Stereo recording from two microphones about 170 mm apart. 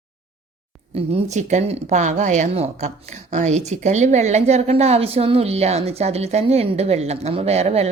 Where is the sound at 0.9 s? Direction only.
40° right (ahead or behind).